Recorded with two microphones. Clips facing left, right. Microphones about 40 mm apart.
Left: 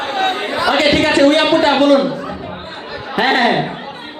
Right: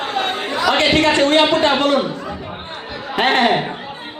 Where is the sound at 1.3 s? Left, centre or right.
Right.